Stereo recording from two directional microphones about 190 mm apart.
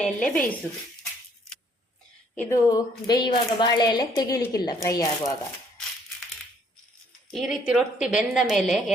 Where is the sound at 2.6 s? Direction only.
20° left (ahead or behind).